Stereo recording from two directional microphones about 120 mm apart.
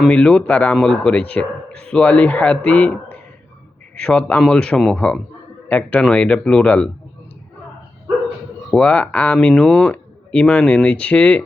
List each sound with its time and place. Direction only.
0.0 s speech: 10° left (ahead or behind)
8.7 s speech: 10° left (ahead or behind)